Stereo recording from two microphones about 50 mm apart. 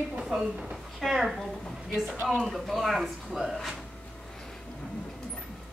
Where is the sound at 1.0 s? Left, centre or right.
Centre.